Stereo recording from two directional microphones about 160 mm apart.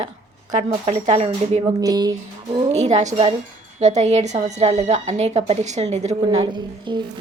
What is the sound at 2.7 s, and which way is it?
A woman's voice, 45° right (ahead or behind).